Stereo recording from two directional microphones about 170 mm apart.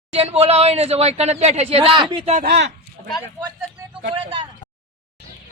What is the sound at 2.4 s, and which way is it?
Speech, 80° right.